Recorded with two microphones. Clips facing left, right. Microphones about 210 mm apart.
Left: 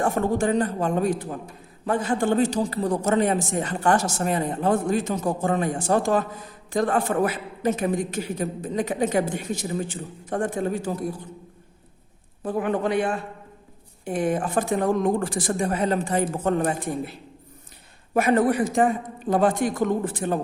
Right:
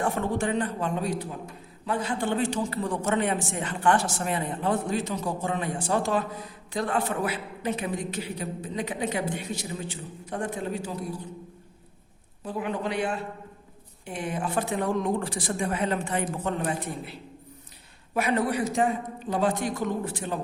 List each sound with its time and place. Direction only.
0.0 s a man's voice: 45° left (ahead or behind)
12.5 s a man's voice: 50° left (ahead or behind)